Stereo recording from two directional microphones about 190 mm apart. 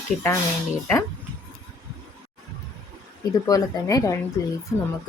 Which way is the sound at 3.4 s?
20° left (ahead or behind).